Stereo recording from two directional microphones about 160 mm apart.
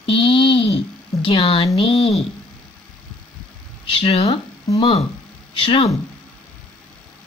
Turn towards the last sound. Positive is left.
turn(degrees=35)  # may be behind; listen again after turning